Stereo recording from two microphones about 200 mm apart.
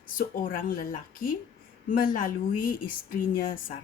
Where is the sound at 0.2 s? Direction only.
45° left (ahead or behind).